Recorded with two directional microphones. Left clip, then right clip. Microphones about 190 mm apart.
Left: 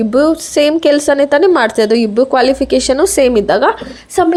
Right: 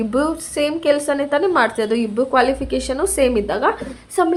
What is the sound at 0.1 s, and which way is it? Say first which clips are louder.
A woman's voice: left 11 dB; 25° left (ahead or behind).